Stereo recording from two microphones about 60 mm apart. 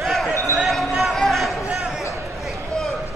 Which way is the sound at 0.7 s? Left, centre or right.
Centre.